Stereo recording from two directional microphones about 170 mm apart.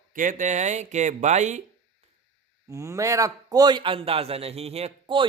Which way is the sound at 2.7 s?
20° right (ahead or behind).